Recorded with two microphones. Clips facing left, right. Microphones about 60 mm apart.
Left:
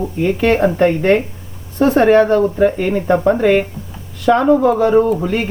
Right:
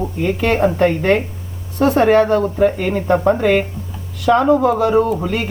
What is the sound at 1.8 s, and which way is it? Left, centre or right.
Speech, left.